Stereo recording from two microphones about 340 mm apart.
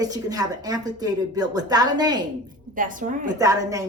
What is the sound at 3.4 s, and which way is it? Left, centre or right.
Speech, centre.